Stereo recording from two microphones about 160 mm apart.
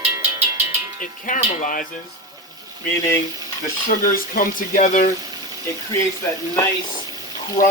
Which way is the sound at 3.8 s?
60° left (ahead or behind).